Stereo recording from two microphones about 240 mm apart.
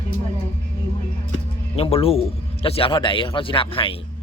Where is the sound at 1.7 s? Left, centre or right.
Left.